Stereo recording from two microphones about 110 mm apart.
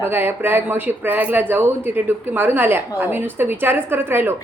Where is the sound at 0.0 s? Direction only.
20° right (ahead or behind).